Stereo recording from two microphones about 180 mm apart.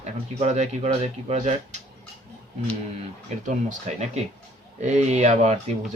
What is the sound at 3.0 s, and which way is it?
Speech, 45° right (ahead or behind).